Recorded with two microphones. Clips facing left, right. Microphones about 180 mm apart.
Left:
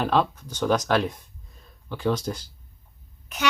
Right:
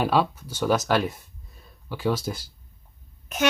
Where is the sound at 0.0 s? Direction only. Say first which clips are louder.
Even; 5° right (ahead or behind).